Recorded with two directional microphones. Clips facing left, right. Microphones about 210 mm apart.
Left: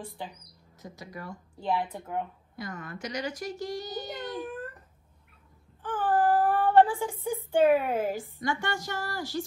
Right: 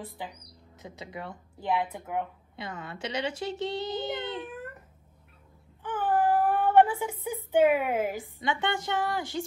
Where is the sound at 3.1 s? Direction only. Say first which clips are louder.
Right 2 dB; 25° right (ahead or behind).